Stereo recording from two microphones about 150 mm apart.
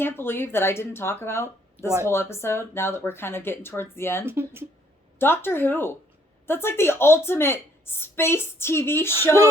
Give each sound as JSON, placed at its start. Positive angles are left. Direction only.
{"t": 0.0, "sound": "a woman's voice", "side_deg": 15}
{"t": 4.3, "sound": "speech", "side_deg": -15}
{"t": 5.2, "sound": "a woman's voice", "side_deg": 15}